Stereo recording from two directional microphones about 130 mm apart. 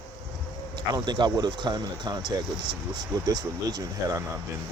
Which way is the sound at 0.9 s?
35° right (ahead or behind).